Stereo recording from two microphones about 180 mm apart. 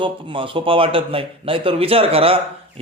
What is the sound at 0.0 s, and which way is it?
A man's voice, 30° right (ahead or behind).